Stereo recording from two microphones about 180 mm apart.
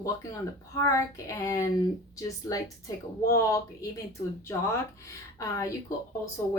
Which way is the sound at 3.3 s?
15° left (ahead or behind).